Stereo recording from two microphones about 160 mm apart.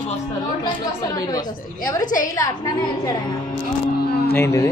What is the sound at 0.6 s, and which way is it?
Speech, 20° left (ahead or behind).